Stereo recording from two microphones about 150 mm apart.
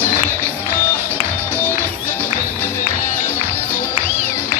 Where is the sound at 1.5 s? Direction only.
15° right (ahead or behind).